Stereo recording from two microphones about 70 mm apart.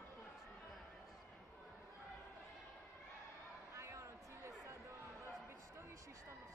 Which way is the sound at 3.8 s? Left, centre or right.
Right.